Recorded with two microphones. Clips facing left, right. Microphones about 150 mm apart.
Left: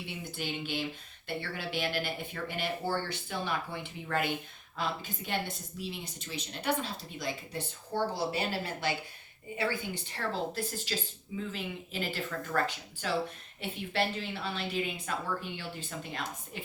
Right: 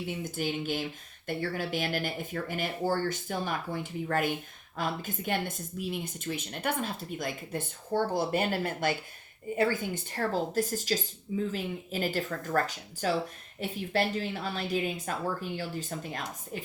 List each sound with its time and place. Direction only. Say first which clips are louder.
0.1 s a woman's voice: right 5 dB; 45° right (ahead or behind)